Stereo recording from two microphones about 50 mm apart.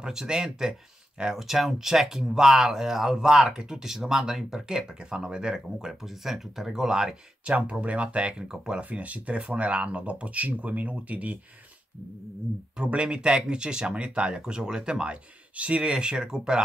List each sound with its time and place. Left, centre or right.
0.0 s speech: centre
7.4 s speech: right
8.9 s speech: right
12.7 s speech: right